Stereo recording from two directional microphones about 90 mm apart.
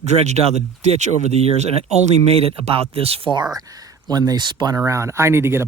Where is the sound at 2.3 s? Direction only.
90° right.